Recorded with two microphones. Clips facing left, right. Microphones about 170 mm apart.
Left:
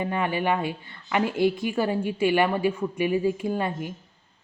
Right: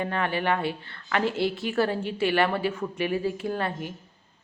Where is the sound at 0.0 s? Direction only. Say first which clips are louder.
Left 1 dB; 10° left (ahead or behind).